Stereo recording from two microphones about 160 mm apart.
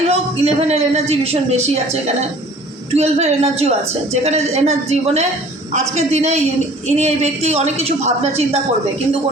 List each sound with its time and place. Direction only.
0.1 s a man's voice: 40° right (ahead or behind)